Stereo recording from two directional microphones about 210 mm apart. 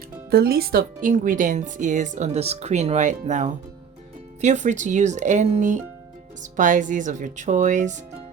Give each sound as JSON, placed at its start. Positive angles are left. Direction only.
{"t": 0.3, "sound": "speech", "side_deg": -50}